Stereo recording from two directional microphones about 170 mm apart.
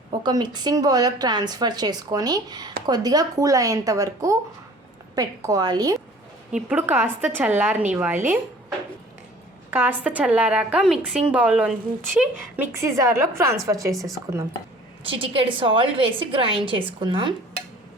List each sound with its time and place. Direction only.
0.2 s speech: 25° right (ahead or behind)
6.5 s a woman's voice: 10° right (ahead or behind)
9.6 s a woman's voice: 10° right (ahead or behind)
15.0 s a woman's voice: 30° right (ahead or behind)